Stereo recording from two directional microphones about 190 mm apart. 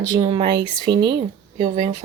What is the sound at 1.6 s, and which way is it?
Speech, 40° right (ahead or behind).